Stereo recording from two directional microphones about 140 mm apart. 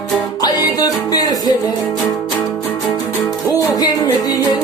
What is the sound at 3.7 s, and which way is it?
Music, 25° left (ahead or behind).